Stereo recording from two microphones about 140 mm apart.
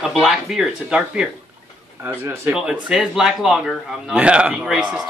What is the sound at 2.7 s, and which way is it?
A man's voice, 5° right (ahead or behind).